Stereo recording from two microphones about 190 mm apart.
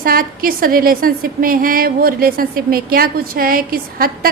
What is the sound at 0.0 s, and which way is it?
A woman's voice, 50° right (ahead or behind).